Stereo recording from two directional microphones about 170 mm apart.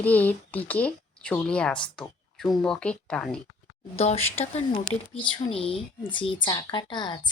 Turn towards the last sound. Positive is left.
turn(degrees=25)  # may be behind; listen again after turning